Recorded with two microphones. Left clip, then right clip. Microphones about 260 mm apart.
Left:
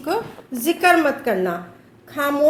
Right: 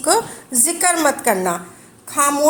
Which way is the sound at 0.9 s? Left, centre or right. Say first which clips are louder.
Even; right.